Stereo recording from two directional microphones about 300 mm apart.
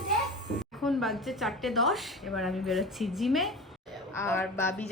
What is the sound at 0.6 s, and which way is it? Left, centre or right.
A woman's voice, centre.